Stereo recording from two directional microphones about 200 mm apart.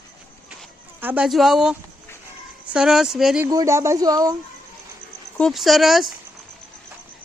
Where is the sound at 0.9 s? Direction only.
10° right (ahead or behind).